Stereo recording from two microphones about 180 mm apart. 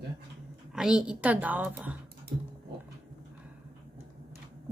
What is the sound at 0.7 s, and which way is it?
A woman's voice, 5° right (ahead or behind).